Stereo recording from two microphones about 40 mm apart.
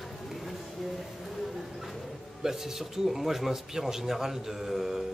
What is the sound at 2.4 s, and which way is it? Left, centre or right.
Speech, centre.